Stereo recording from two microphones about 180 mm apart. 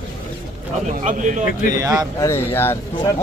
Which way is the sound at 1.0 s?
45° right (ahead or behind).